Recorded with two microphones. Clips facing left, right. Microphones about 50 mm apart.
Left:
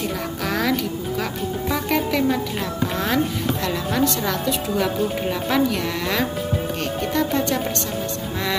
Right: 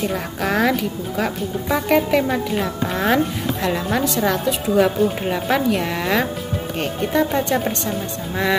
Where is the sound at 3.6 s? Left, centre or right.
Centre.